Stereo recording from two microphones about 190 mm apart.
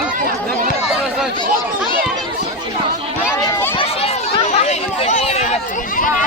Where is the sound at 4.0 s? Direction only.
30° left (ahead or behind).